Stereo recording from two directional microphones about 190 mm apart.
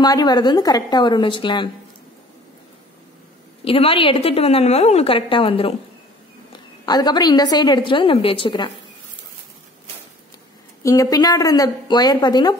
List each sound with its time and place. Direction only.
0.0 s a woman's voice: 20° left (ahead or behind)
3.6 s a woman's voice: 30° left (ahead or behind)
10.8 s a woman's voice: 15° left (ahead or behind)